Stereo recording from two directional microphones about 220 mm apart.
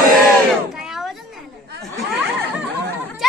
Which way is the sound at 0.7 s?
Centre (ahead or behind).